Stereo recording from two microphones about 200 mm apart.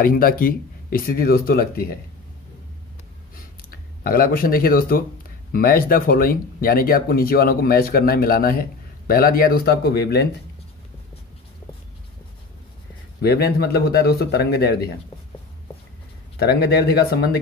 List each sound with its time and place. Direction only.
0.0 s speech: 45° left (ahead or behind)
3.7 s speech: 45° left (ahead or behind)
13.2 s speech: 55° left (ahead or behind)
16.3 s speech: 55° left (ahead or behind)